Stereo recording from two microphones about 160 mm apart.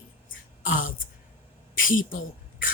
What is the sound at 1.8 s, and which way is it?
Speech, 60° left (ahead or behind).